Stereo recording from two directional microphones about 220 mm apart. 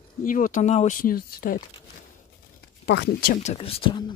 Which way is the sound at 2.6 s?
50° left (ahead or behind).